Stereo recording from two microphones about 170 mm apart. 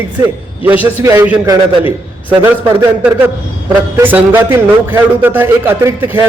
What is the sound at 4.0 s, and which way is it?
A man's voice, 10° right (ahead or behind).